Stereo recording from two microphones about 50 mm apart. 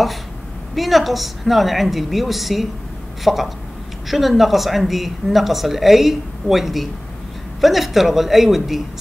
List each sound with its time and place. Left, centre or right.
0.7 s speech: centre